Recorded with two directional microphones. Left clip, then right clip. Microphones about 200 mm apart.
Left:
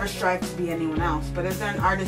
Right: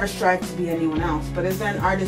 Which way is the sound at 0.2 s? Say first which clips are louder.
Right 4 dB; 10° left (ahead or behind).